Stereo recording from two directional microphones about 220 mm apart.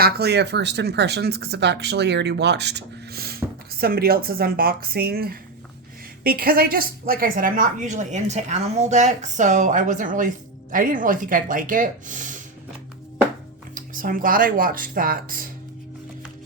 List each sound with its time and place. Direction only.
0.0 s a woman's voice: 45° right (ahead or behind)
13.7 s a woman's voice: 40° right (ahead or behind)